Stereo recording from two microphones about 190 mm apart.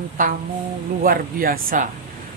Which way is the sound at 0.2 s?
45° right (ahead or behind).